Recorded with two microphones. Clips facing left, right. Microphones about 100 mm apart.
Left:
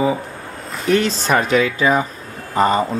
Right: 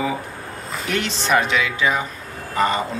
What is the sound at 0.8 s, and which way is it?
Speech, 35° left (ahead or behind).